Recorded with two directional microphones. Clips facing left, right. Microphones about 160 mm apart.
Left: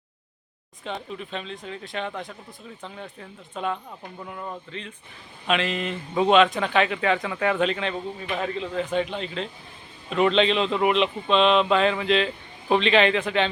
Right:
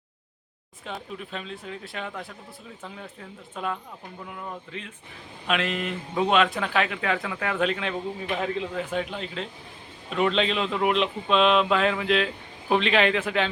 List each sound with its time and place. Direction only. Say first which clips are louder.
0.9 s speech: left 3 dB; 5° right (ahead or behind)